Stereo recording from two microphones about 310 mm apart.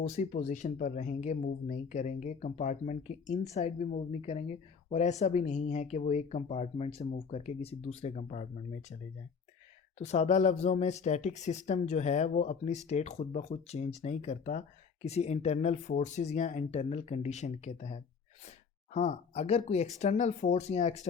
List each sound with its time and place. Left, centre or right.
0.1 s speech: left
10.0 s speech: left